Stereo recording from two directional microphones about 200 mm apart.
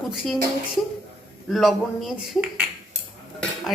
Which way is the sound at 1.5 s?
Centre (ahead or behind).